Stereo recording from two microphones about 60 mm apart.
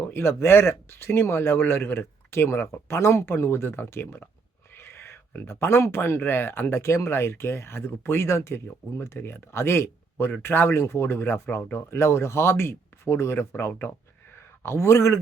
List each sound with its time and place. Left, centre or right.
0.1 s speech: left
2.9 s speech: left